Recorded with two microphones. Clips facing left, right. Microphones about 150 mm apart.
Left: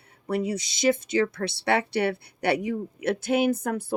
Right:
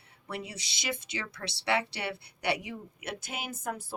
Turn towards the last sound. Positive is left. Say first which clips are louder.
# left 14 dB
turn(degrees=65)  # may be behind; listen again after turning